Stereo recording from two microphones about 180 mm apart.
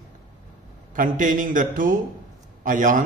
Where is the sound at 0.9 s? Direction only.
45° right (ahead or behind).